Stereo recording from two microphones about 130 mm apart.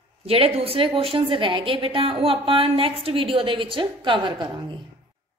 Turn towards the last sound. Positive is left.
turn(degrees=-35)  # may be behind; listen again after turning